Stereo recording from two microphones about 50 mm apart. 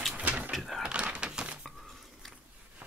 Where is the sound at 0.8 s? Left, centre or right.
Right.